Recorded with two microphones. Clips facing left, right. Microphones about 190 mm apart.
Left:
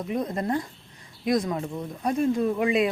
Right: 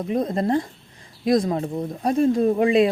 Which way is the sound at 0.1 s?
30° right (ahead or behind).